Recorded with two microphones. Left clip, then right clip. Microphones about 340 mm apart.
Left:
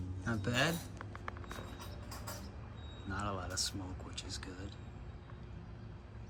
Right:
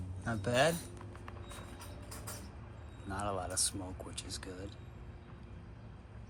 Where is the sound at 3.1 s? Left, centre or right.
Centre.